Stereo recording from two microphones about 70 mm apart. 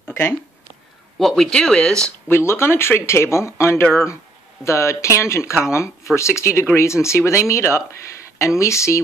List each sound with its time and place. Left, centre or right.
0.0 s a sound: left
1.1 s speech: centre
2.2 s speech: left